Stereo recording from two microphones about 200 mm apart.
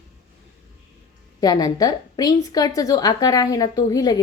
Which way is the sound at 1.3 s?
20° left (ahead or behind).